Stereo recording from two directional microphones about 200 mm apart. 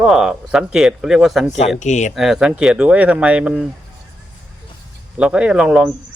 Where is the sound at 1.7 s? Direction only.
35° left (ahead or behind).